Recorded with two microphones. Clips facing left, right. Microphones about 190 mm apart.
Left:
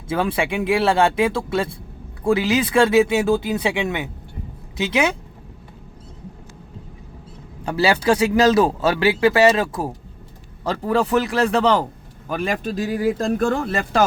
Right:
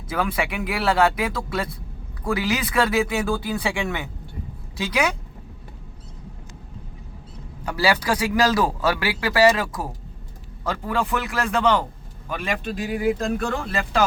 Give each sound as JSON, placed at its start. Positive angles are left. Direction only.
{"t": 0.1, "sound": "a man's voice", "side_deg": 30}
{"t": 7.6, "sound": "a man's voice", "side_deg": 25}